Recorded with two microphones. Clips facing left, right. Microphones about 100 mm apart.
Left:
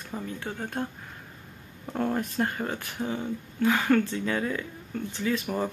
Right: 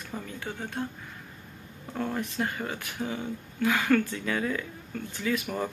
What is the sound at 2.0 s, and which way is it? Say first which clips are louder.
Speech: left 3 dB; 40° left (ahead or behind).